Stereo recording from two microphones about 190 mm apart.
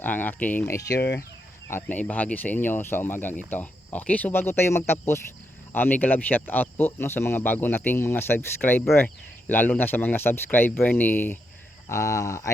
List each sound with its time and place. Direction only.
0.0 s speech: 10° left (ahead or behind)
0.9 s speech: 65° left (ahead or behind)
1.6 s speech: 10° left (ahead or behind)